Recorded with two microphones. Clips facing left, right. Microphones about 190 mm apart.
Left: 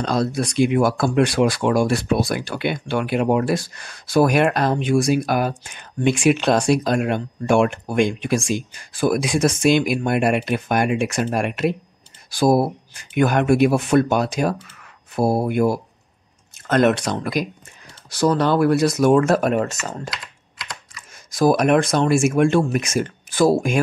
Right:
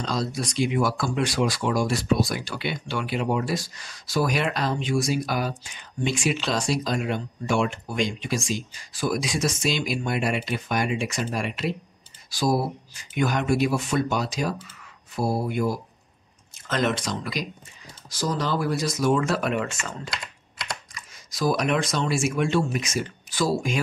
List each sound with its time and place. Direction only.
0.0 s speech: 60° left (ahead or behind)
18.1 s speech: 65° left (ahead or behind); by 20.0 s 40° left (ahead or behind)
20.1 s typing: 25° right (ahead or behind)
21.3 s speech: 50° left (ahead or behind)